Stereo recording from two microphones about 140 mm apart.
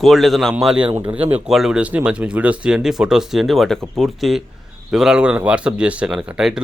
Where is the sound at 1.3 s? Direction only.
5° right (ahead or behind).